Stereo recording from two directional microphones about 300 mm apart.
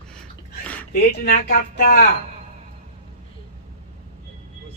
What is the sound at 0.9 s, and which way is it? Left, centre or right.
Speech, left.